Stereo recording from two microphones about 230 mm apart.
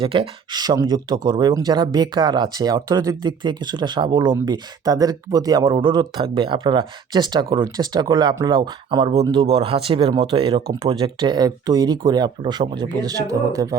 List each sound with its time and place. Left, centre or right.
0.0 s speech: right